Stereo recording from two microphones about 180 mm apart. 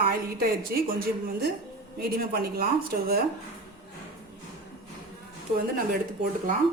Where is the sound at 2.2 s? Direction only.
60° right (ahead or behind).